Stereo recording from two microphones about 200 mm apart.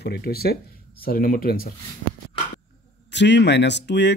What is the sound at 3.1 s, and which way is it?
Speech, 60° left (ahead or behind).